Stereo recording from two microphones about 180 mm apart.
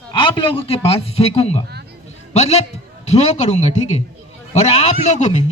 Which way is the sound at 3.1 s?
40° left (ahead or behind).